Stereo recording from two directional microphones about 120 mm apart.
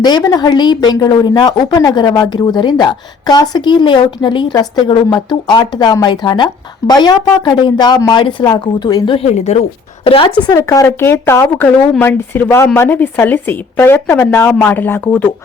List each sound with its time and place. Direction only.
0.0 s a woman's voice: 35° left (ahead or behind)
9.1 s speech: 65° left (ahead or behind); by 10.5 s 45° left (ahead or behind)
10.5 s speech: 30° left (ahead or behind)